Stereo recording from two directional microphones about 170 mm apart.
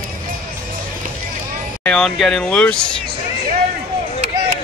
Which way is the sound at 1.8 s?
5° left (ahead or behind).